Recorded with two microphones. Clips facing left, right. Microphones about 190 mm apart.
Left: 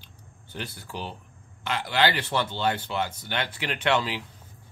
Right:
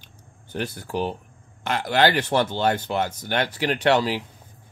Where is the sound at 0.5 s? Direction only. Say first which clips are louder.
Right 9 dB; 50° right (ahead or behind).